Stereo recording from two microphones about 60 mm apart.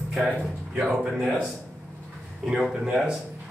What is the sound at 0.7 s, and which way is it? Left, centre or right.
Speech, centre.